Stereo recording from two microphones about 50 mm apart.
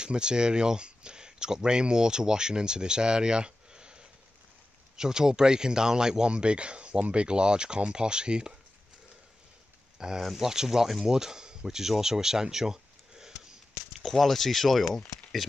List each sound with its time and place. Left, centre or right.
0.0 s speech: centre
9.9 s speech: centre
10.2 s speech: centre
10.5 s speech: centre
11.1 s a sound: centre
14.0 s speech: centre